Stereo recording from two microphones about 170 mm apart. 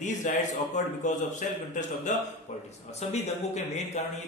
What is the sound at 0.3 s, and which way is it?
A man's voice, 45° left (ahead or behind).